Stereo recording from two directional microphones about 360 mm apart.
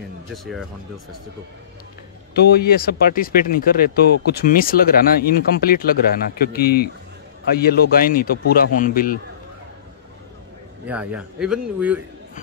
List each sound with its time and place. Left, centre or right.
2.3 s speech: left
10.9 s speech: centre